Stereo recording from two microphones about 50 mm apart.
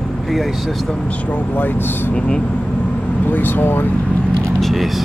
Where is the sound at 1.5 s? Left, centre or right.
Left.